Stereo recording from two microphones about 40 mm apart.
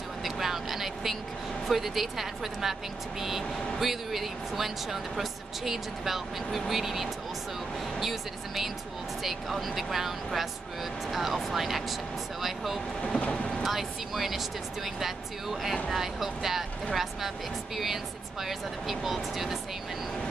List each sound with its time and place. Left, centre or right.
0.2 s vehicle: centre
1.7 s speech: centre
13.2 s vehicle: left
13.6 s speech: centre
18.4 s speech: centre